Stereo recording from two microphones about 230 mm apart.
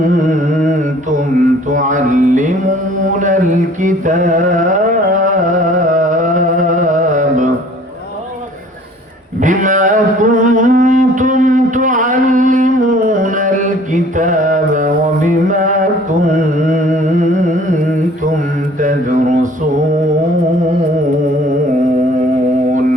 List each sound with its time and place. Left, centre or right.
0.0 s carnatic music: right
1.7 s music: right
3.8 s carnatic music: right
9.4 s a sound: right
18.8 s mantra: right